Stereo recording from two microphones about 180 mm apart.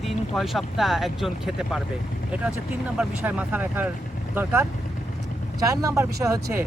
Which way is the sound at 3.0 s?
5° right (ahead or behind).